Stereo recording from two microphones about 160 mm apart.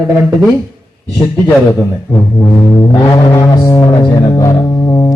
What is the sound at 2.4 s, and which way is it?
Music, 20° left (ahead or behind).